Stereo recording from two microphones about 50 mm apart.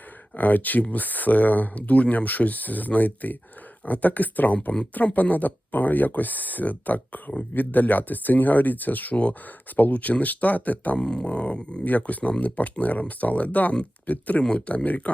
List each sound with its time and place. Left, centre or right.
0.3 s speech: left
10.9 s speech: centre